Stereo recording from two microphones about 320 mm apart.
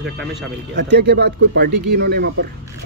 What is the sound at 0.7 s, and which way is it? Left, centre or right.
Speech, right.